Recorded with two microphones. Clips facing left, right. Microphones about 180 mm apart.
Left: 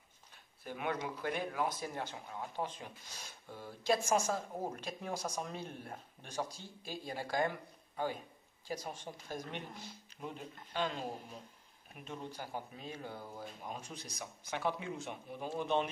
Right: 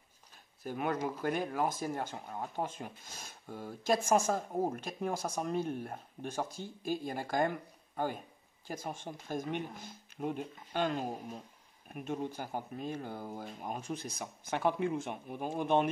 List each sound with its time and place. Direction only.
0.7 s speech: 40° right (ahead or behind)